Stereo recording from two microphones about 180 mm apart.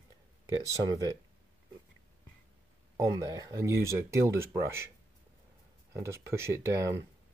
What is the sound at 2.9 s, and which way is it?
Speech, 20° right (ahead or behind).